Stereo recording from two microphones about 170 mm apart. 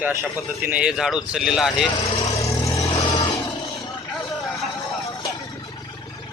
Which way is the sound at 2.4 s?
20° left (ahead or behind).